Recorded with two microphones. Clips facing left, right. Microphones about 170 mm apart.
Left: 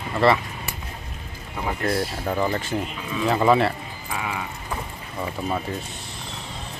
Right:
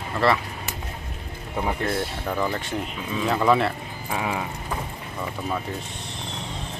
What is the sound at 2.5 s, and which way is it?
Speech, centre (ahead or behind).